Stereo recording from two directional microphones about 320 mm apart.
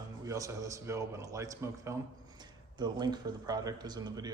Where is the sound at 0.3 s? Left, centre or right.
Centre.